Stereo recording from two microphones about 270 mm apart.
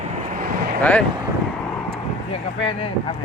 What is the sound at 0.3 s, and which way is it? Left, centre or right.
Vehicle, right.